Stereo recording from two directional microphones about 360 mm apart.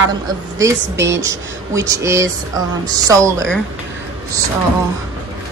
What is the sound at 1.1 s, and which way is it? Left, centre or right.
A woman's voice, centre.